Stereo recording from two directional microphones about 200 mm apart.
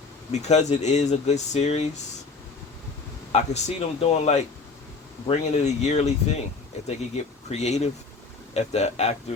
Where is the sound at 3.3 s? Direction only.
35° left (ahead or behind).